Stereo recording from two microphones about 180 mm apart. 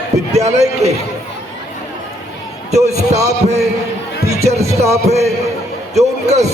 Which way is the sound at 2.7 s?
35° right (ahead or behind).